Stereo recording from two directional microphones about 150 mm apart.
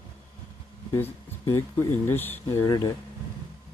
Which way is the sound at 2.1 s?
15° left (ahead or behind).